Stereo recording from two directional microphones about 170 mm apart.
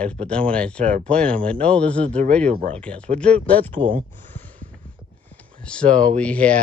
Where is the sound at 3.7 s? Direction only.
30° right (ahead or behind).